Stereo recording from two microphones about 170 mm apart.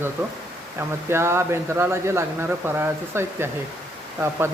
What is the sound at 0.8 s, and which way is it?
Speech, 15° right (ahead or behind).